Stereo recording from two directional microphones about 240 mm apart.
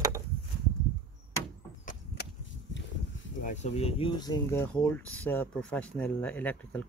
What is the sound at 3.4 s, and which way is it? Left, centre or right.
Speech, left.